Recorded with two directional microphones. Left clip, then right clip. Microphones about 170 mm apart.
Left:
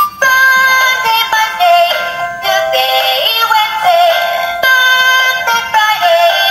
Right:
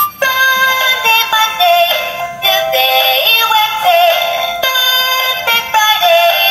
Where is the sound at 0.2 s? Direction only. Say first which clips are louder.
Left 3 dB; 10° left (ahead or behind).